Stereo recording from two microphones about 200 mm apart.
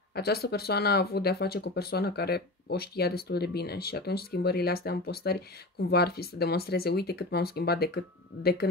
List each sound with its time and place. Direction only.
0.1 s speech: 50° left (ahead or behind)